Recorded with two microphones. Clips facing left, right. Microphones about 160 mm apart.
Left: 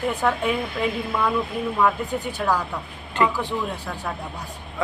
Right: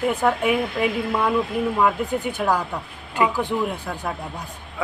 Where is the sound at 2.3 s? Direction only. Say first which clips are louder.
Left 1 dB; 15° right (ahead or behind).